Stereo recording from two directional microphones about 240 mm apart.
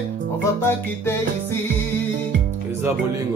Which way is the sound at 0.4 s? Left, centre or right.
Centre.